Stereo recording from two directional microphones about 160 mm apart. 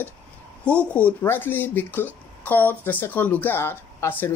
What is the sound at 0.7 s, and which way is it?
Speech, 10° left (ahead or behind).